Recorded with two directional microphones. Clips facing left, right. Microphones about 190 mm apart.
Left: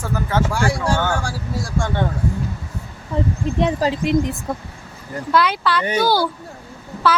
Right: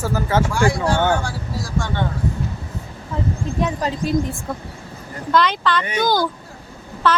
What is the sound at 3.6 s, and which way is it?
Speech, 30° left (ahead or behind).